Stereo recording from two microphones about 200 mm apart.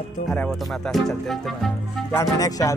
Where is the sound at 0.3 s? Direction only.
5° left (ahead or behind).